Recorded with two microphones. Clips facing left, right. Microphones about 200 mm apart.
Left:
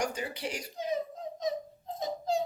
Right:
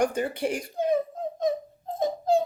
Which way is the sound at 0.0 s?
55° right (ahead or behind).